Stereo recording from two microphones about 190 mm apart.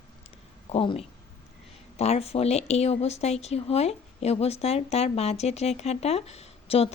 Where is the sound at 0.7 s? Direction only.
30° left (ahead or behind).